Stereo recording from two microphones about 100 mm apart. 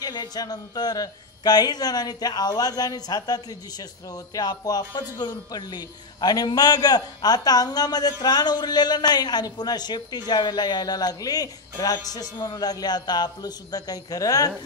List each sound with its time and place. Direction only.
0.0 s a man's voice: 40° left (ahead or behind)